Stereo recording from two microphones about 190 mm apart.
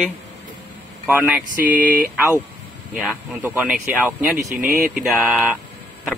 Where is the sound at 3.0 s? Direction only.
10° right (ahead or behind).